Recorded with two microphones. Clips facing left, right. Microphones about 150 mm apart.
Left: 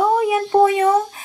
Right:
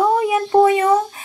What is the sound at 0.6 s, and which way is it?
Speech, 45° right (ahead or behind).